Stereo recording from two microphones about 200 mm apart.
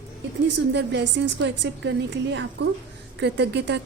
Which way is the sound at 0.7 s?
60° right (ahead or behind).